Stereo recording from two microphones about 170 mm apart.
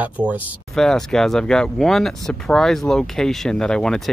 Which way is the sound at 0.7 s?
5° left (ahead or behind).